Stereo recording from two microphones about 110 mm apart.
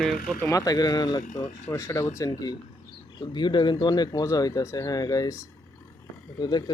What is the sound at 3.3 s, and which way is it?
Speech, 45° left (ahead or behind).